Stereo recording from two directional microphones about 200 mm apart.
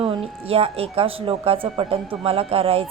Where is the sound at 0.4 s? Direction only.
30° right (ahead or behind).